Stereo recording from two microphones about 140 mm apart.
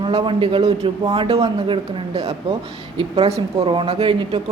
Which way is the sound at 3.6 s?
40° right (ahead or behind).